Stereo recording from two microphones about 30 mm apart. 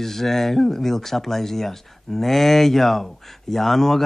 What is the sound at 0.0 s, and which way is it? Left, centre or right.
Speech, centre.